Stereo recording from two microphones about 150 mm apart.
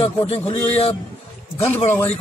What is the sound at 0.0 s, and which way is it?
Speech, 35° left (ahead or behind).